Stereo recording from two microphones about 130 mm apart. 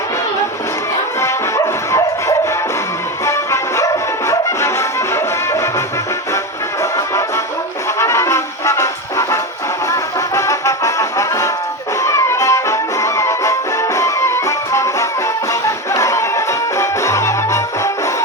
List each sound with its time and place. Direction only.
1.2 s music: 25° left (ahead or behind)
7.9 s brass instrument: 20° left (ahead or behind)
12.0 s music: 25° left (ahead or behind)